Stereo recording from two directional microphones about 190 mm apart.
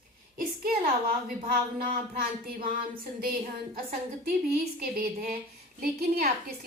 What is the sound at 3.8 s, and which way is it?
A woman's voice, 50° right (ahead or behind).